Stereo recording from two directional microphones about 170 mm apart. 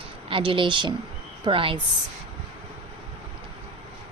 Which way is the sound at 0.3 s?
30° right (ahead or behind).